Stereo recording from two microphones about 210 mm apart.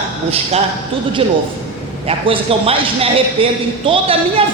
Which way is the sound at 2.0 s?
25° right (ahead or behind).